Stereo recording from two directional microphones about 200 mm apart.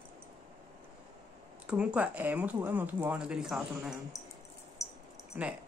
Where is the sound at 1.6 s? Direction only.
5° right (ahead or behind).